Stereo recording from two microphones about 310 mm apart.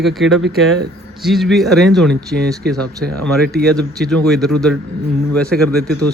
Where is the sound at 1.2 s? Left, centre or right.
Centre.